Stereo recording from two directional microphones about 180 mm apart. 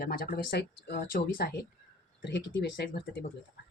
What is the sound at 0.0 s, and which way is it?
Speech, 55° left (ahead or behind).